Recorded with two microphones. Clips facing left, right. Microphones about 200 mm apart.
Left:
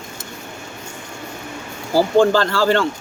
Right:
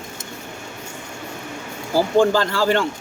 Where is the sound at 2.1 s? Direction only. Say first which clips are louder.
Left 2 dB; 15° right (ahead or behind).